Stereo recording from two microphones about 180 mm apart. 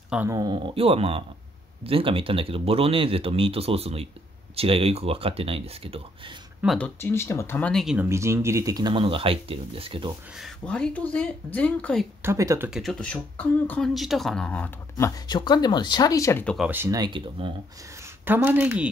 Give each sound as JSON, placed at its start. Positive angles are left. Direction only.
{"t": 0.1, "sound": "speech", "side_deg": -10}
{"t": 0.4, "sound": "speech", "side_deg": -25}
{"t": 6.6, "sound": "speech", "side_deg": 0}
{"t": 7.0, "sound": "speech", "side_deg": 15}
{"t": 8.1, "sound": "speech", "side_deg": -15}
{"t": 10.3, "sound": "speech", "side_deg": 0}
{"t": 12.2, "sound": "speech", "side_deg": -15}
{"t": 16.5, "sound": "speech", "side_deg": -10}
{"t": 18.0, "sound": "speech", "side_deg": -10}